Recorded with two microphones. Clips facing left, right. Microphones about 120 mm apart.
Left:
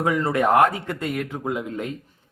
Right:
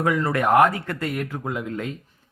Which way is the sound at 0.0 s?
25° left (ahead or behind).